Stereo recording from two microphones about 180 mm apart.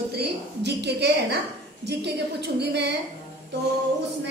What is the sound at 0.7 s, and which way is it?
A woman's voice, 70° right (ahead or behind).